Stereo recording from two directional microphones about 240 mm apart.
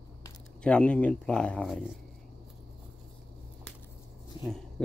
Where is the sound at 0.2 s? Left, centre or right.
Centre.